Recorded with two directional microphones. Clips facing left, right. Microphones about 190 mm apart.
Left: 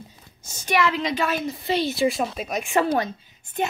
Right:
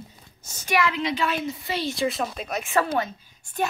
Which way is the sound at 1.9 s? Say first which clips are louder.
Left 3 dB; 5° left (ahead or behind).